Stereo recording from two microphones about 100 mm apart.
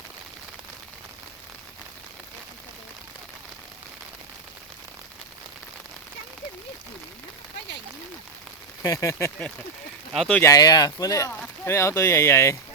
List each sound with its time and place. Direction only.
8.8 s speech: 35° left (ahead or behind)
10.1 s speech: 5° left (ahead or behind)
10.4 s speech: 40° left (ahead or behind)
11.3 s speech: 20° left (ahead or behind)